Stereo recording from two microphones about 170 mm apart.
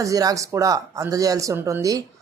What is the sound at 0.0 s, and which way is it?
Speech, 20° right (ahead or behind).